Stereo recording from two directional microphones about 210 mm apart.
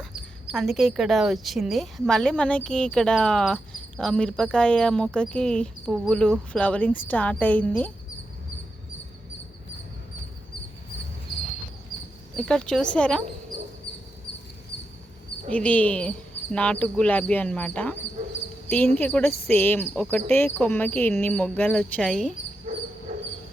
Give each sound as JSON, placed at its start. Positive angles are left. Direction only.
{"t": 0.5, "sound": "speech", "side_deg": 0}
{"t": 11.9, "sound": "a sound", "side_deg": 0}
{"t": 12.4, "sound": "speech", "side_deg": 5}
{"t": 15.5, "sound": "speech", "side_deg": 5}
{"t": 18.9, "sound": "speech", "side_deg": 5}